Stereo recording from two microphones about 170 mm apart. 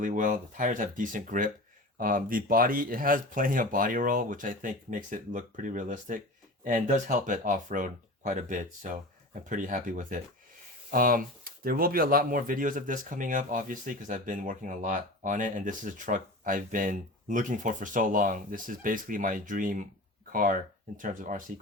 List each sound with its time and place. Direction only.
0.0 s speech: 50° right (ahead or behind)